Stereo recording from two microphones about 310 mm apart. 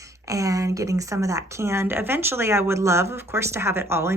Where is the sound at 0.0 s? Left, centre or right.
Centre.